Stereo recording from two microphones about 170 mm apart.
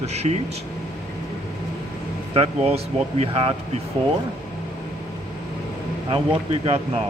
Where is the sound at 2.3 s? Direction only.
35° right (ahead or behind).